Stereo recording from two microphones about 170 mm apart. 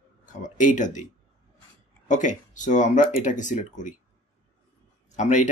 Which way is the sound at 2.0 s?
45° left (ahead or behind).